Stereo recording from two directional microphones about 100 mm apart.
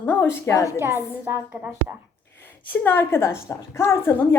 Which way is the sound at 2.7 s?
25° left (ahead or behind).